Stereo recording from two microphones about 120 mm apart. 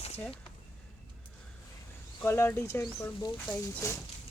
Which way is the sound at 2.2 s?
20° left (ahead or behind).